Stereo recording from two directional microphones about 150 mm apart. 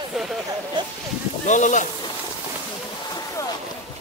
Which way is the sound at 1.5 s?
55° left (ahead or behind).